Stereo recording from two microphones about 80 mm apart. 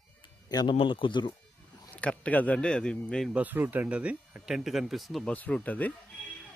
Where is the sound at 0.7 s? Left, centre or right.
Left.